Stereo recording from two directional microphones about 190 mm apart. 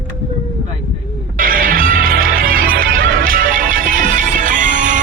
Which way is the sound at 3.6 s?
45° right (ahead or behind).